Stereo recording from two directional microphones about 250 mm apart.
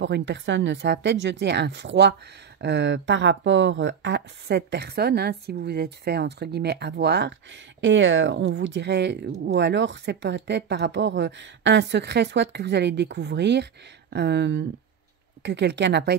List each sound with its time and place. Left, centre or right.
0.0 s speech: right